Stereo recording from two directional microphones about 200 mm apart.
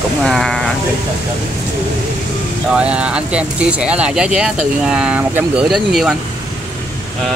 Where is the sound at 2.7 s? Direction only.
5° right (ahead or behind).